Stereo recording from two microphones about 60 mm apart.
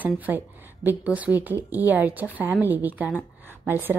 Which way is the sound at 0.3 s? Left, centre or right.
Right.